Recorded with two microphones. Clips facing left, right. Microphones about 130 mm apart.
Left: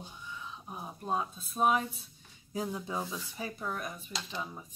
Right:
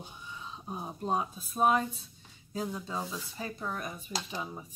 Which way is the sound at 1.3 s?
Centre (ahead or behind).